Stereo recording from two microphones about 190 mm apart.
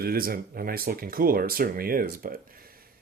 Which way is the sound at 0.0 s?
50° right (ahead or behind).